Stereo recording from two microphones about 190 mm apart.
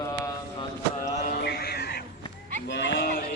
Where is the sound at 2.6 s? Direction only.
65° left (ahead or behind).